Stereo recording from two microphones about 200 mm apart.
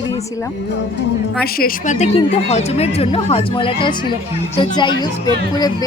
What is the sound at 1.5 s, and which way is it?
Speech, 40° left (ahead or behind).